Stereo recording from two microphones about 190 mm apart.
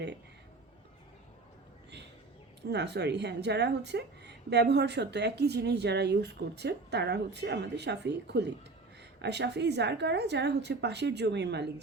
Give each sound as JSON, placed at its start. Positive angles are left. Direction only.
{"t": 2.6, "sound": "speech", "side_deg": -60}